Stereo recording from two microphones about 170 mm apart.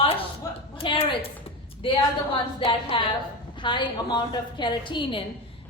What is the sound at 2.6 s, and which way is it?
A woman's voice, 30° left (ahead or behind).